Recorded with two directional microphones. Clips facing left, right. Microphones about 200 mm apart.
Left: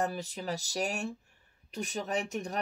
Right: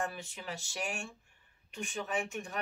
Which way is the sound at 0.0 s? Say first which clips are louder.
Left 5 dB; 40° left (ahead or behind).